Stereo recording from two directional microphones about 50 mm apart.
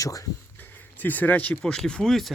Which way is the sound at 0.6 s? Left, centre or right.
Left.